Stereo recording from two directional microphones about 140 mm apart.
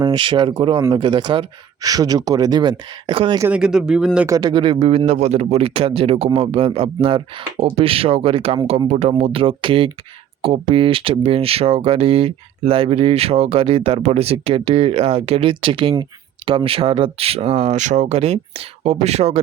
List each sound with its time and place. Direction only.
0.0 s speech: 35° right (ahead or behind)
3.5 s speech: 5° right (ahead or behind)
4.3 s speech: 30° right (ahead or behind); by 19.4 s 50° right (ahead or behind)